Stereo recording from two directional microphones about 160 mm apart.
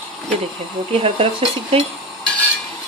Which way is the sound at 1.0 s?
35° right (ahead or behind).